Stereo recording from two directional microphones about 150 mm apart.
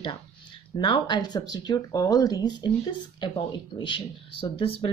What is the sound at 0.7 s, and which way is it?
Speech, 35° left (ahead or behind).